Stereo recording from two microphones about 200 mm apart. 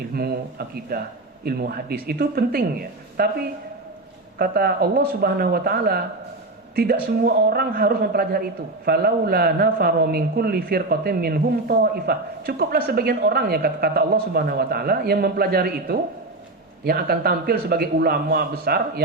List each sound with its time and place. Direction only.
0.1 s a man's voice: 50° right (ahead or behind)
7.2 s a man's voice: 50° right (ahead or behind)